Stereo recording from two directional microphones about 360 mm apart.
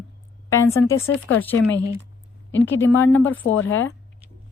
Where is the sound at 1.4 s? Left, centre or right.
Centre.